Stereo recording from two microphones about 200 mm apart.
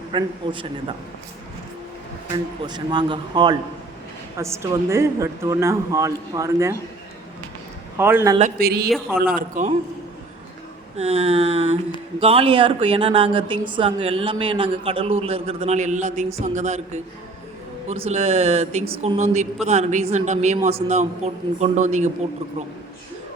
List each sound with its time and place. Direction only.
0.1 s a woman's voice: 25° right (ahead or behind)
2.3 s a woman's voice: 20° right (ahead or behind)
7.9 s a woman's voice: 10° right (ahead or behind)
8.4 s speech: 40° right (ahead or behind)
9.3 s speech: 40° right (ahead or behind)
10.9 s a woman's voice: 30° right (ahead or behind)